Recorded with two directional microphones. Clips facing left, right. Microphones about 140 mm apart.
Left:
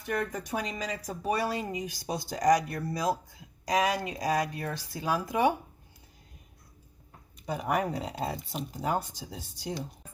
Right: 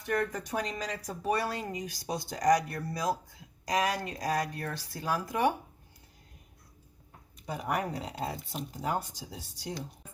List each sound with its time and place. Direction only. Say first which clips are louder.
0.1 s speech: even; 10° left (ahead or behind)
3.7 s speech: left 2 dB; 10° left (ahead or behind)
7.4 s speech: left 3 dB; 20° left (ahead or behind)